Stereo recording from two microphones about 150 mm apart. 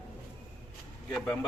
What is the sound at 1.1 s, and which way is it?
Speech, 10° left (ahead or behind).